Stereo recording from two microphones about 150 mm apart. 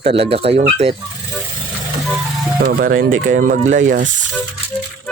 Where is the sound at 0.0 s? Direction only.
40° right (ahead or behind).